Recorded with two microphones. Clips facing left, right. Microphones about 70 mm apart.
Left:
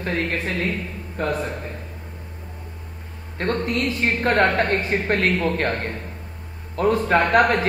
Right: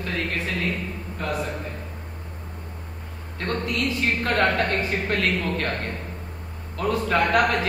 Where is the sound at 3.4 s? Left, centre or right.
Left.